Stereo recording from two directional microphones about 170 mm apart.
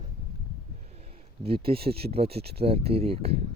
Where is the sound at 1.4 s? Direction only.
35° right (ahead or behind).